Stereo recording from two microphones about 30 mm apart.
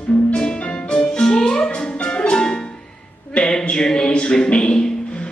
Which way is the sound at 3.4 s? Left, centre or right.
Left.